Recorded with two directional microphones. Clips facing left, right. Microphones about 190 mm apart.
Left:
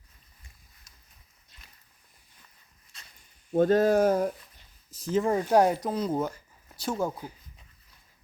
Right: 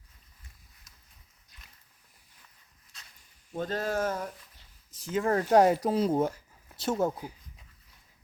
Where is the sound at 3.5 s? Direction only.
50° left (ahead or behind).